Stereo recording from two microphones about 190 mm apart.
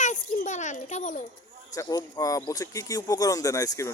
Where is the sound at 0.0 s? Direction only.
40° left (ahead or behind).